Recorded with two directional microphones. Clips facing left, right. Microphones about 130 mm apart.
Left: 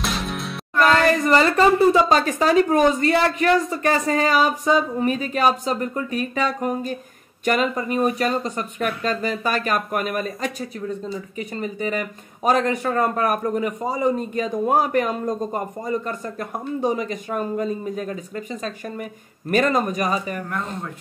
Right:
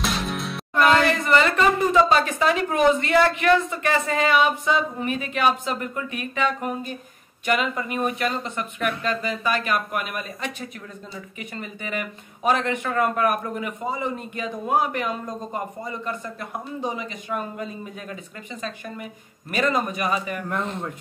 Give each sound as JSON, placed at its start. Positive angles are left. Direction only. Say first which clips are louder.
{"t": 0.0, "sound": "music", "louder": "even", "side_deg": 0}
{"t": 1.0, "sound": "speech", "louder": "left 3 dB", "side_deg": 40}